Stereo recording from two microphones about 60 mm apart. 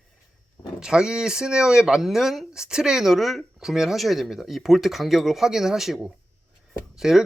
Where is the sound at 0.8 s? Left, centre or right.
Centre.